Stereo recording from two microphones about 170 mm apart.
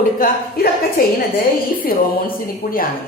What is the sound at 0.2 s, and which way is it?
Speech, 60° left (ahead or behind).